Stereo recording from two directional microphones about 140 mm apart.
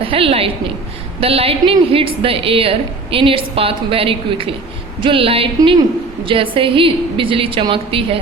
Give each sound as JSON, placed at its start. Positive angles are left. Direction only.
{"t": 0.0, "sound": "a woman's voice", "side_deg": -40}